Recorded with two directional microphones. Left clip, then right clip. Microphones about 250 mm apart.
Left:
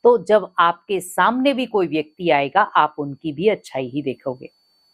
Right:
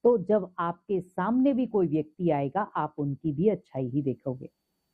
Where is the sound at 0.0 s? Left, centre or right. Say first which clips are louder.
Left 9 dB; centre.